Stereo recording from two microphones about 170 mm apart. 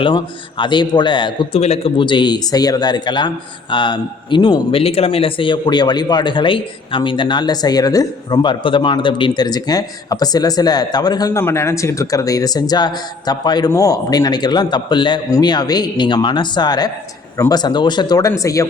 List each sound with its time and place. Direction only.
0.0 s a man's voice: 30° left (ahead or behind)